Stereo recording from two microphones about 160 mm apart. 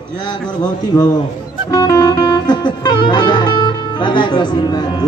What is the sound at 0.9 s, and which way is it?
Music, 20° left (ahead or behind).